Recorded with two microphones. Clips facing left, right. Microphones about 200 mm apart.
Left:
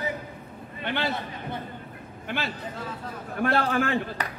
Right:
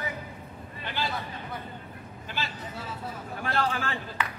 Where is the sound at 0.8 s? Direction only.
60° left (ahead or behind).